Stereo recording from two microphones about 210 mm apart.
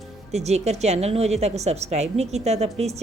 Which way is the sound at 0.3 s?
30° right (ahead or behind).